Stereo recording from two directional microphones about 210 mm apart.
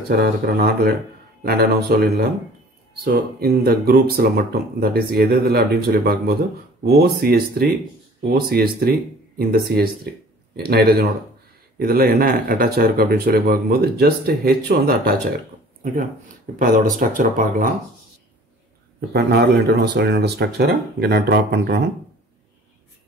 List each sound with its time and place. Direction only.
0.1 s speech: 50° right (ahead or behind)
18.9 s speech: 50° right (ahead or behind)